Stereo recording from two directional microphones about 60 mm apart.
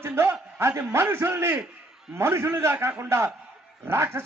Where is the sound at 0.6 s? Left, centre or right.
Right.